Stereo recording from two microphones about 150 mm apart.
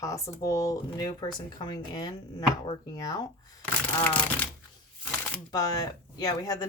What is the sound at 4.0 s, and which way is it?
Speech, 10° left (ahead or behind).